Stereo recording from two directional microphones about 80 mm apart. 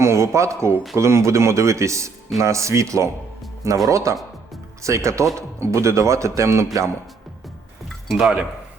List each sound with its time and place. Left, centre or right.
0.0 s speech: right
8.1 s speech: centre